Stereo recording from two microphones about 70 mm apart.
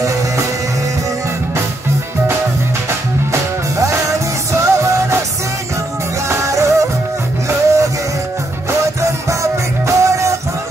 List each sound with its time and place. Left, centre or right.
4.5 s music: right
6.2 s music: right